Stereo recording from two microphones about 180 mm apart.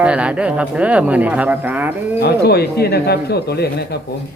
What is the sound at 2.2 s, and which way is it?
Speech, 60° left (ahead or behind).